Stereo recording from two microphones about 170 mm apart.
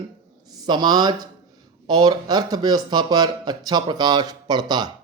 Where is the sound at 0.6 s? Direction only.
25° right (ahead or behind).